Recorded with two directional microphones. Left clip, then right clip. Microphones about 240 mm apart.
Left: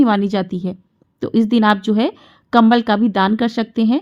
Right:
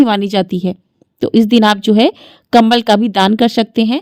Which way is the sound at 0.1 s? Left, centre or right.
Right.